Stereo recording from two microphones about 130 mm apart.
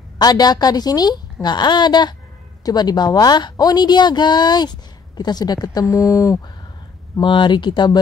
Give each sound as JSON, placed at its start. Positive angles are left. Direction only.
{"t": 0.2, "sound": "a woman's voice", "side_deg": 30}
{"t": 7.2, "sound": "a woman's voice", "side_deg": 35}